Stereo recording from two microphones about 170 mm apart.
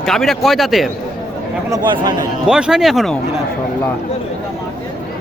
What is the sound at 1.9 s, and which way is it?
Speech, 25° right (ahead or behind).